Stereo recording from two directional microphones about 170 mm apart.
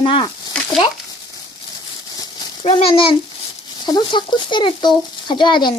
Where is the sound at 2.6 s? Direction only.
35° left (ahead or behind).